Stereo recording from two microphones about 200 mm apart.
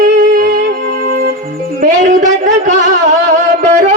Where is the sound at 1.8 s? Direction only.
40° right (ahead or behind).